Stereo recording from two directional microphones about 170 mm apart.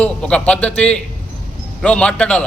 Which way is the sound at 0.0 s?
5° left (ahead or behind).